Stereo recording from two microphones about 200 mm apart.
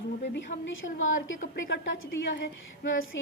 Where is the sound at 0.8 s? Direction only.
45° left (ahead or behind).